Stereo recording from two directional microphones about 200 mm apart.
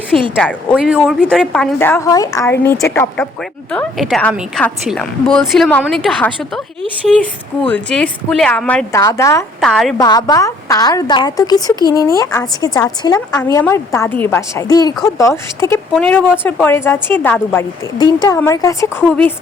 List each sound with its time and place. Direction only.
0.3 s a woman's voice: centre (ahead or behind)
7.7 s speech: 5° left (ahead or behind)
9.6 s a woman's voice: centre (ahead or behind)
10.0 s speech: 20° left (ahead or behind)